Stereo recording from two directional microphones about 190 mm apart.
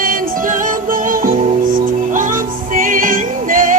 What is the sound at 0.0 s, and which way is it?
Music, 45° right (ahead or behind).